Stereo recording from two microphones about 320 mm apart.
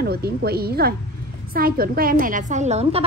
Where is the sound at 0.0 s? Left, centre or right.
Right.